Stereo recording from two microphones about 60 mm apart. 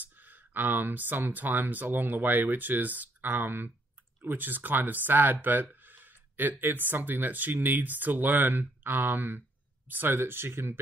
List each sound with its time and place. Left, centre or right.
0.0 s speech: right